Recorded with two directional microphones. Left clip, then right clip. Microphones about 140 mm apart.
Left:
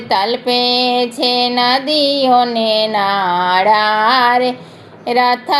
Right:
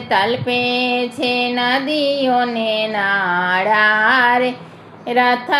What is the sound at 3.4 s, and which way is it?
Child singing, 35° left (ahead or behind).